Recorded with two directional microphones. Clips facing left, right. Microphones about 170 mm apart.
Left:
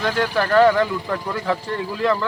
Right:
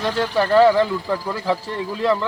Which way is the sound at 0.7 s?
20° right (ahead or behind).